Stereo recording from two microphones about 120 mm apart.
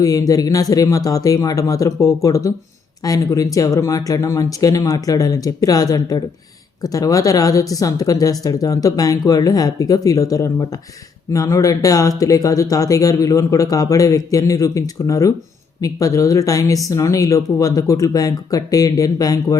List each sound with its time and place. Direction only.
0.0 s speech: 30° left (ahead or behind)